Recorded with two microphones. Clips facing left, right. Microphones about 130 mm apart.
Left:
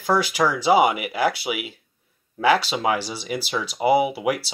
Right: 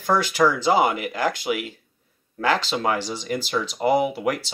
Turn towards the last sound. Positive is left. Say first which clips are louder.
# left 1 dB
turn(degrees=10)  # may be behind; listen again after turning